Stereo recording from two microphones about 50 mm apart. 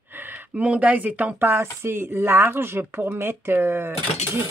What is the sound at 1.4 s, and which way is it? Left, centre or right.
Speech, right.